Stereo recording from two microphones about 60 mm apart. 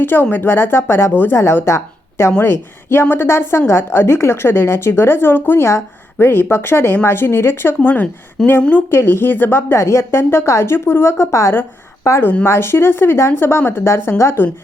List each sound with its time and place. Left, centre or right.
0.0 s a woman's voice: left
7.8 s speech: left
8.4 s a woman's voice: centre
8.9 s a woman's voice: left
12.5 s a woman's voice: left